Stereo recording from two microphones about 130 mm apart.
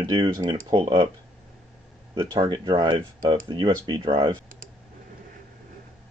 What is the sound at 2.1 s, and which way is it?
Speech, 35° right (ahead or behind).